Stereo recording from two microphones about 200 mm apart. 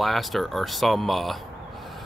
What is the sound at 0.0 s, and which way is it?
Speech, centre (ahead or behind).